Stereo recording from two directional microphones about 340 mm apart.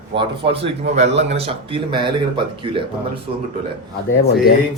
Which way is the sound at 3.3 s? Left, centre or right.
Centre.